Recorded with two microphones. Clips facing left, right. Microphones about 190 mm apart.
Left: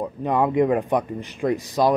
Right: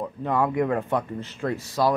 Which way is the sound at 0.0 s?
15° left (ahead or behind).